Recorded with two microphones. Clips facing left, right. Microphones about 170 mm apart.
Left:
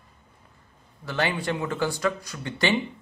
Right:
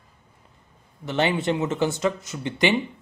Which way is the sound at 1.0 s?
20° right (ahead or behind).